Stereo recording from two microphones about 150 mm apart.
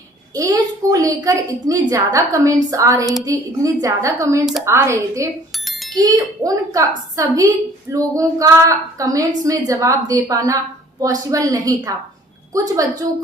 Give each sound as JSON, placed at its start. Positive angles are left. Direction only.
{"t": 0.3, "sound": "a woman's voice", "side_deg": -20}
{"t": 5.6, "sound": "bicycle bell", "side_deg": 0}
{"t": 6.0, "sound": "a woman's voice", "side_deg": -25}